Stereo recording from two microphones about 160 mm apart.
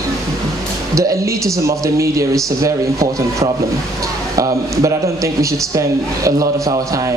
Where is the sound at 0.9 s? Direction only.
20° right (ahead or behind).